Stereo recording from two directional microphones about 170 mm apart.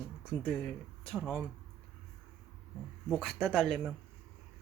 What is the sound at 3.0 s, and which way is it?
Speech, centre (ahead or behind).